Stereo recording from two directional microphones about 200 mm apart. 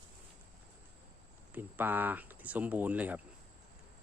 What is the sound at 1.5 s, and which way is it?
Speech, 10° right (ahead or behind).